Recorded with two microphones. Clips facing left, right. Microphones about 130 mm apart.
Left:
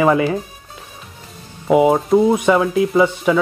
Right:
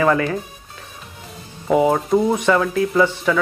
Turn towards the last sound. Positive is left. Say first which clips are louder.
# left 3 dB
turn(degrees=15)  # may be behind; listen again after turning